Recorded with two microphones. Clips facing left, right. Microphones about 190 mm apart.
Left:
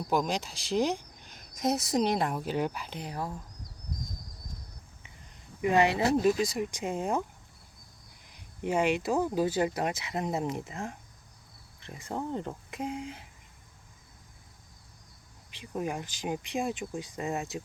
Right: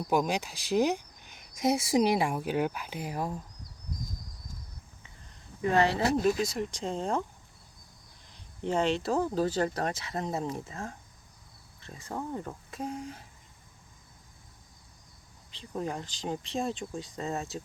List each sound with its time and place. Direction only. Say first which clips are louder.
0.1 s speech: right 1 dB; 5° right (ahead or behind)
5.6 s speech: left 1 dB; 15° left (ahead or behind)
6.2 s speech: left 1 dB; centre (ahead or behind)
6.8 s speech: even; 10° left (ahead or behind)
8.3 s speech: even; 10° left (ahead or behind)
15.4 s speech: left 1 dB; 15° left (ahead or behind)